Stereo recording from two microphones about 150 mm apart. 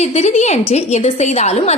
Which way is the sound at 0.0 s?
50° left (ahead or behind).